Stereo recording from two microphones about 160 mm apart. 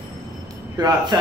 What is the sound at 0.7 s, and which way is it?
Speech, 25° right (ahead or behind).